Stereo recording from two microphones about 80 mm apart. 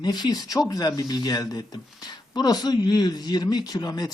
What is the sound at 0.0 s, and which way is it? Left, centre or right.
Speech, left.